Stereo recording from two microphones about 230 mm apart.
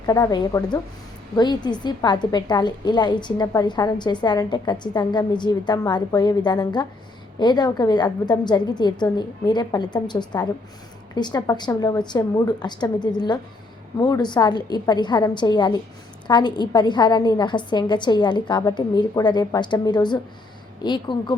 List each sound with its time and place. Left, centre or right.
0.0 s a woman's voice: centre